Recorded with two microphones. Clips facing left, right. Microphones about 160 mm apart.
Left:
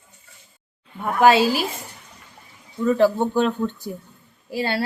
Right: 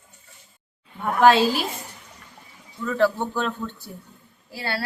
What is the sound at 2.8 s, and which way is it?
A woman's voice, 15° left (ahead or behind).